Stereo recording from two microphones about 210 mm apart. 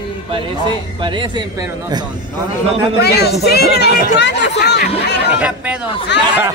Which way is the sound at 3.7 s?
50° left (ahead or behind).